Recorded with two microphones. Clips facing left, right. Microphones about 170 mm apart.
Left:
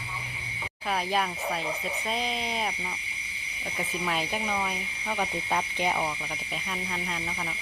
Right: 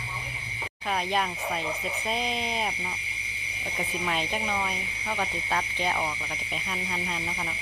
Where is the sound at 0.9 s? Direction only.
Centre (ahead or behind).